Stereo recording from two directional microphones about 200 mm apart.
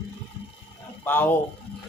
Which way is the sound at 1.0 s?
10° left (ahead or behind).